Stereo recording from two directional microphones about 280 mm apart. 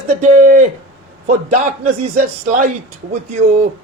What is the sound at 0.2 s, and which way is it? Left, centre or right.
Speech, right.